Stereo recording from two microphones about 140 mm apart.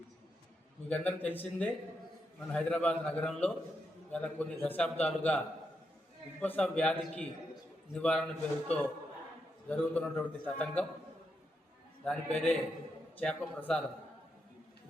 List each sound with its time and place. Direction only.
0.9 s a man's voice: 10° left (ahead or behind)
6.4 s a man's voice: 10° left (ahead or behind)
12.0 s a man's voice: 5° left (ahead or behind)